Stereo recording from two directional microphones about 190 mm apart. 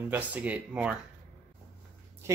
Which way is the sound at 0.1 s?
5° right (ahead or behind).